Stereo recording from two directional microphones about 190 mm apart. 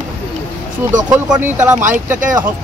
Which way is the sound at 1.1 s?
10° right (ahead or behind).